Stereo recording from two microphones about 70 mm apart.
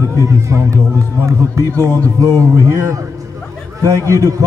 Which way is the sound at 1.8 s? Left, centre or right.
Right.